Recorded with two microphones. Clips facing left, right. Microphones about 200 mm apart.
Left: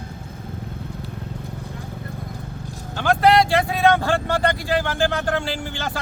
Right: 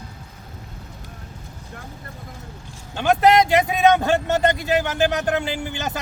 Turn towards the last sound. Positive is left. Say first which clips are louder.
# right 1 dB
turn(degrees=-20)  # may be behind; listen again after turning